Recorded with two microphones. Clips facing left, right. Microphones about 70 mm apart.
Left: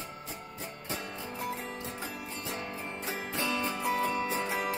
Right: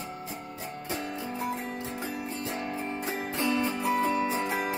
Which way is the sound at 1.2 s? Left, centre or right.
Centre.